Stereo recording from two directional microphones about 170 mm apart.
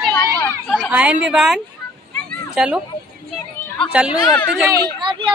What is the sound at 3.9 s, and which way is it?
Speech, 5° right (ahead or behind).